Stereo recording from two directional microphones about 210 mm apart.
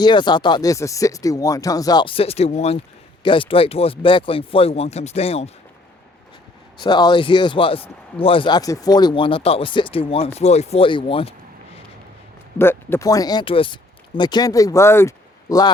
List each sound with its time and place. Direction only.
0.0 s speech: 20° left (ahead or behind)
6.7 s speech: 20° left (ahead or behind)
12.5 s speech: 10° left (ahead or behind)